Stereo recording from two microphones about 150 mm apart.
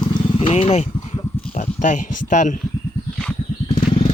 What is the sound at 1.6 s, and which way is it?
Speech, 60° left (ahead or behind).